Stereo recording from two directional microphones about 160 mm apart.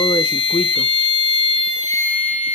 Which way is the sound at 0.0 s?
25° left (ahead or behind).